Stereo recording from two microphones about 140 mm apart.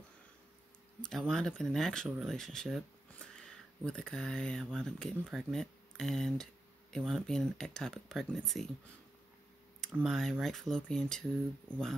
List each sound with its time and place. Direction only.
1.0 s speech: centre (ahead or behind)
10.0 s speech: centre (ahead or behind)